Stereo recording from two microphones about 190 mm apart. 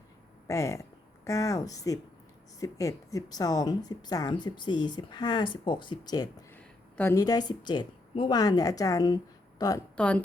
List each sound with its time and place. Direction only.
0.4 s a woman's voice: 15° left (ahead or behind)
6.5 s a woman's voice: 10° left (ahead or behind)
9.9 s a woman's voice: 5° left (ahead or behind)